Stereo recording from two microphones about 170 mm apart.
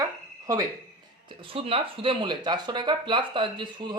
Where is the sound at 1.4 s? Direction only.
30° right (ahead or behind).